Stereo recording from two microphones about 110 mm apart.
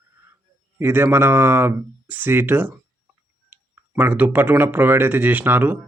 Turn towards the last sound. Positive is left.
turn(degrees=-15)  # may be behind; listen again after turning